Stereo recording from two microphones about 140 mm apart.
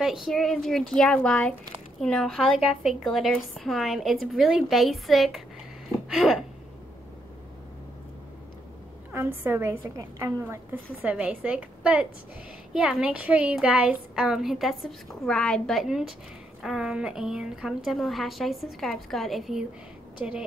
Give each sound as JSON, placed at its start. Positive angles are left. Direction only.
{"t": 0.0, "sound": "a woman's voice", "side_deg": 0}
{"t": 5.9, "sound": "a sound", "side_deg": -5}
{"t": 9.1, "sound": "a woman's voice", "side_deg": -15}